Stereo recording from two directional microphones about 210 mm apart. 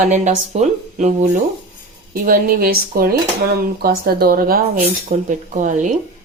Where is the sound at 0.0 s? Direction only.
35° right (ahead or behind).